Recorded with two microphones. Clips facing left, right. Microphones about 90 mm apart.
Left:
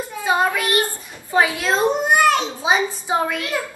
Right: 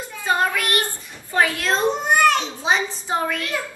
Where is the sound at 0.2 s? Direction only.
15° left (ahead or behind).